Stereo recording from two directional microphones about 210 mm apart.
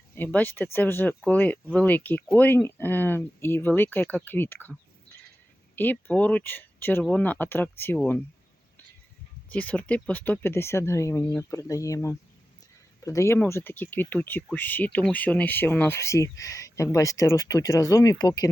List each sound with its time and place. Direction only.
0.2 s speech: 10° left (ahead or behind)
9.5 s speech: 5° left (ahead or behind)